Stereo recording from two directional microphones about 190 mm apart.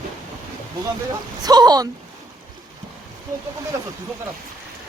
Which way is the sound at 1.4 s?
20° right (ahead or behind).